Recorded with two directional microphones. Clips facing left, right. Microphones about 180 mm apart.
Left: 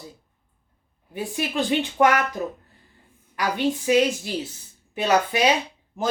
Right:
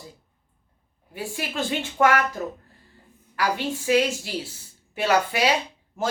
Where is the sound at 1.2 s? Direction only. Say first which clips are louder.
Left 4 dB; 20° left (ahead or behind).